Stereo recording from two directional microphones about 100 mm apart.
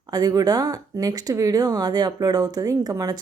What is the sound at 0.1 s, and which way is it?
Speech, 40° right (ahead or behind).